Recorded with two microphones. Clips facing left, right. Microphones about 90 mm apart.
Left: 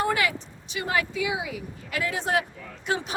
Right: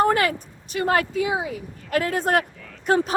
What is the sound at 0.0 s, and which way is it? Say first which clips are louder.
A woman's voice: right 6 dB; 45° right (ahead or behind).